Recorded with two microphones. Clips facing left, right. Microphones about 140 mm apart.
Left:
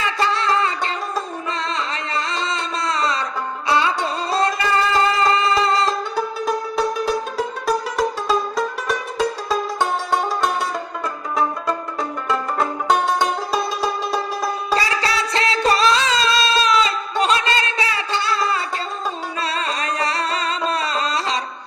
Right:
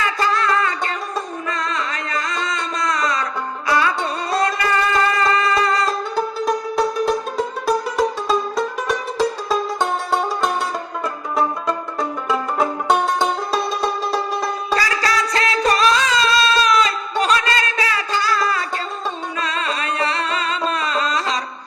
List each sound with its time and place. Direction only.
0.0 s music: 30° left (ahead or behind)
6.1 s music: centre (ahead or behind)
11.9 s music: centre (ahead or behind)
14.8 s music: 25° left (ahead or behind)